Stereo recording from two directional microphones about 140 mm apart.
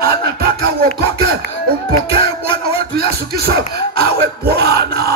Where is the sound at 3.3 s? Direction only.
90° right.